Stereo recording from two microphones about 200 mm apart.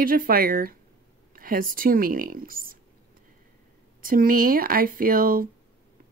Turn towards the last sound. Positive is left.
turn(degrees=-45)  # may be behind; listen again after turning